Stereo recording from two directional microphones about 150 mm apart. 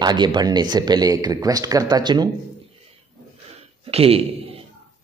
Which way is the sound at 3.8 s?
40° right (ahead or behind).